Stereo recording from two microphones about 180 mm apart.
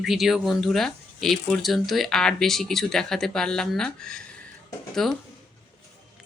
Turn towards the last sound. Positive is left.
turn(degrees=0)  # may be behind; listen again after turning